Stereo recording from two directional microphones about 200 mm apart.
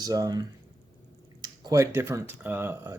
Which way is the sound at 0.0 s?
20° right (ahead or behind).